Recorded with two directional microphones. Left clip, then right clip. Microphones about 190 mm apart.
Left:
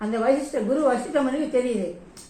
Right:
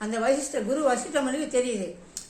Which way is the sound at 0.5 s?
15° right (ahead or behind).